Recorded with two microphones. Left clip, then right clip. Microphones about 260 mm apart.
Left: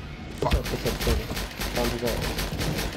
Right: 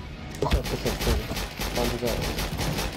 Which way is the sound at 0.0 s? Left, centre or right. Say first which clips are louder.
Left 1 dB; centre.